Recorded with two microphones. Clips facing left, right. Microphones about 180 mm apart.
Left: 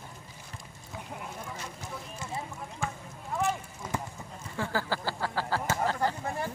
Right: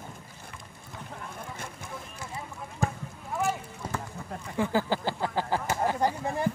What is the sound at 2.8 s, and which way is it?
Basketball bounce, 40° right (ahead or behind).